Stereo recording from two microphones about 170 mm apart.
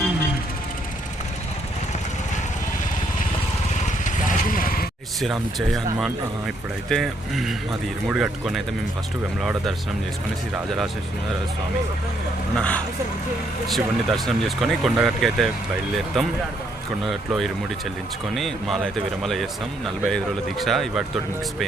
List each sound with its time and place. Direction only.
3.8 s vehicle: 50° left (ahead or behind)
5.2 s speech: centre (ahead or behind)
12.5 s speech: 5° left (ahead or behind)